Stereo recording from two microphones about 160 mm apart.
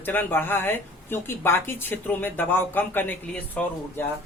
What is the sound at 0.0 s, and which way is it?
Speech, 10° left (ahead or behind).